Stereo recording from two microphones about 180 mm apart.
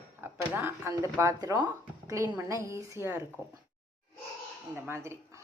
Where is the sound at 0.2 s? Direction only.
10° right (ahead or behind).